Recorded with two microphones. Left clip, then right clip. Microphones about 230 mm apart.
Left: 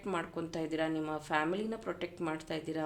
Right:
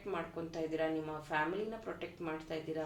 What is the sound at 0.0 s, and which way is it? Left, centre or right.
Speech, left.